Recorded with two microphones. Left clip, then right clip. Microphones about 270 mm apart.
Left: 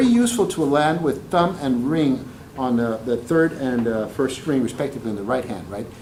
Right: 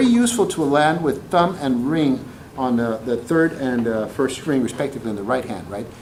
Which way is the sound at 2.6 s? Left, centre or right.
Centre.